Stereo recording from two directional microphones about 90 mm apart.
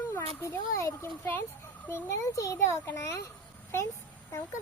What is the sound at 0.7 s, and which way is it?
A child's voice, 35° left (ahead or behind).